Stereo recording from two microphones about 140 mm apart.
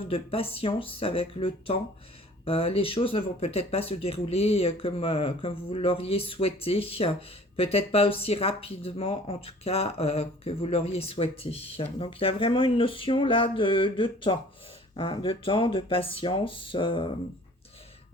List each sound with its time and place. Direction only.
0.1 s speech: 40° left (ahead or behind)